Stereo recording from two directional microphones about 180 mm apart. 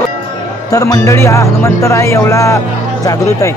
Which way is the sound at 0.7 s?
20° left (ahead or behind).